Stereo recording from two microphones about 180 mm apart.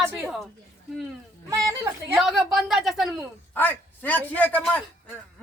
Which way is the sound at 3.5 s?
10° left (ahead or behind).